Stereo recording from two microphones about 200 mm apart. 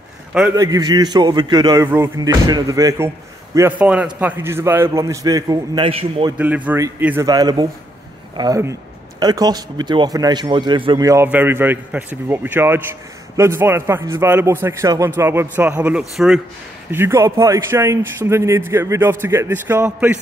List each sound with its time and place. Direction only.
0.6 s a man's voice: 20° right (ahead or behind)
6.3 s a man's voice: 5° right (ahead or behind)
16.9 s a man's voice: 15° right (ahead or behind)